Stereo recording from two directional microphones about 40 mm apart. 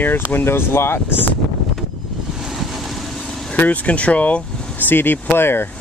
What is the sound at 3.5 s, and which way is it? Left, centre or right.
Speech, left.